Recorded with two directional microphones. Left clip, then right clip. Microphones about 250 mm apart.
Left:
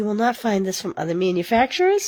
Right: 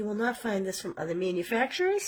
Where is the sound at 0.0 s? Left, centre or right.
Left.